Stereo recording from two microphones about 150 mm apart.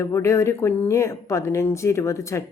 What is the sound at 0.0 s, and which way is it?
Speech, 20° left (ahead or behind).